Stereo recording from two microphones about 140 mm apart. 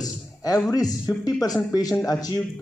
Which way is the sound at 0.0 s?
25° left (ahead or behind).